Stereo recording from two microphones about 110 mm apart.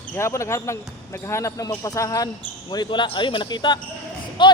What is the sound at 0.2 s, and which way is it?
Speech, 25° left (ahead or behind).